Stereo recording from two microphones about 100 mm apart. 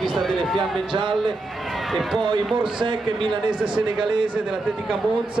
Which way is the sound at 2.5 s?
55° right (ahead or behind).